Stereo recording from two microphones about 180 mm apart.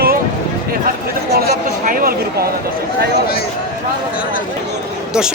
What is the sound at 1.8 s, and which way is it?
Speech, 50° right (ahead or behind).